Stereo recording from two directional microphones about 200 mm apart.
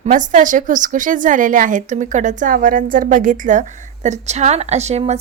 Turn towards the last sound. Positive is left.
turn(degrees=-35)  # may be behind; listen again after turning